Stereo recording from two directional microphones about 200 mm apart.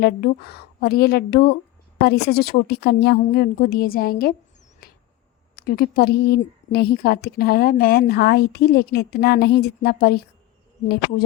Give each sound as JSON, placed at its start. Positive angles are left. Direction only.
{"t": 0.0, "sound": "a woman's voice", "side_deg": 55}
{"t": 4.8, "sound": "a sound", "side_deg": 50}
{"t": 5.5, "sound": "a woman's voice", "side_deg": 45}